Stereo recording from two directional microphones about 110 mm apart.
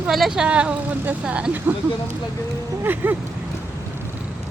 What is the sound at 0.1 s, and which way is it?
A woman's voice, 5° right (ahead or behind).